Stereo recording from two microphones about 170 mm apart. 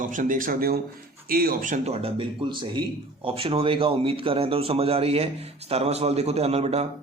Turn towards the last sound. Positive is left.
turn(degrees=-40)  # may be behind; listen again after turning